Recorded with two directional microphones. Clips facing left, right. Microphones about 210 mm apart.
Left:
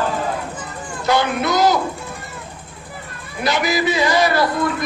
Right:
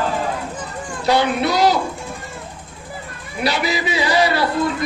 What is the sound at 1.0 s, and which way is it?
Child singing, 35° right (ahead or behind).